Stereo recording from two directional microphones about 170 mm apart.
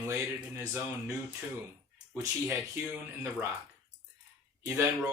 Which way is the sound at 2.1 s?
15° right (ahead or behind).